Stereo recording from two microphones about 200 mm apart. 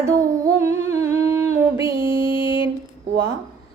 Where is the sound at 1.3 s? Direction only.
10° right (ahead or behind).